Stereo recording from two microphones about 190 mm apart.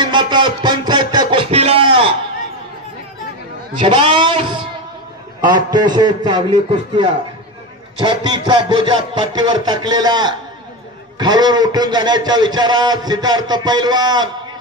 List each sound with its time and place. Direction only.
0.0 s a man's voice: 25° right (ahead or behind)
3.8 s a man's voice: 25° right (ahead or behind)